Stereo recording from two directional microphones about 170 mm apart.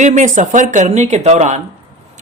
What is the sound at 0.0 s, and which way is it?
Speech, 45° right (ahead or behind).